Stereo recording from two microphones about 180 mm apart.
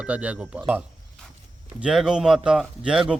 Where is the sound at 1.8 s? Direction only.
5° right (ahead or behind).